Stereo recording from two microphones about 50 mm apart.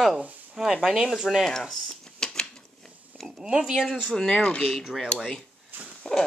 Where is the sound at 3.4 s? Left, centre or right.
Centre.